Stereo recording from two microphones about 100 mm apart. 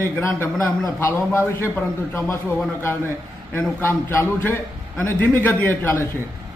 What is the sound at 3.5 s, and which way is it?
A man's voice, 25° left (ahead or behind).